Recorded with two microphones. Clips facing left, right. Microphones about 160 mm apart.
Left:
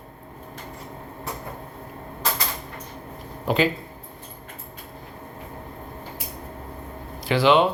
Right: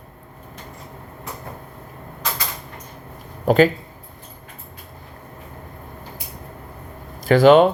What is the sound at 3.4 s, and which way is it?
Speech, 45° right (ahead or behind).